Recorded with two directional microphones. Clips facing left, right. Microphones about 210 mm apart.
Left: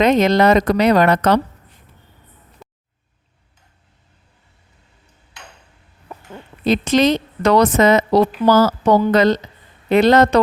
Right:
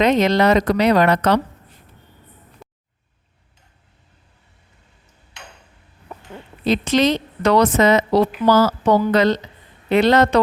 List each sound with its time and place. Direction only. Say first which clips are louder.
0.0 s a woman's voice: left 2 dB; 50° left (ahead or behind)
6.7 s a woman's voice: left 2 dB; 45° left (ahead or behind)